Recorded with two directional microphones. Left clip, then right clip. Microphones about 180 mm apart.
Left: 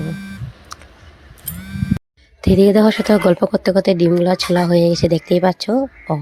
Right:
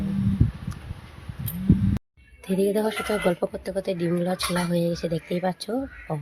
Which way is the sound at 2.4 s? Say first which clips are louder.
Left 11 dB; 55° left (ahead or behind).